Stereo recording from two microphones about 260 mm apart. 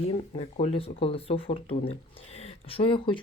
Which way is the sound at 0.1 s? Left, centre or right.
Left.